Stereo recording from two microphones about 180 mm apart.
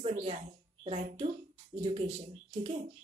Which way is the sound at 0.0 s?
35° right (ahead or behind).